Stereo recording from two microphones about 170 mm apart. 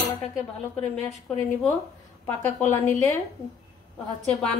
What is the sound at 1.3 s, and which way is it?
Speech, 5° left (ahead or behind).